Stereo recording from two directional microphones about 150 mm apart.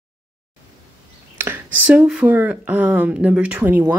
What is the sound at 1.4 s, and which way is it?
Speech, 10° right (ahead or behind).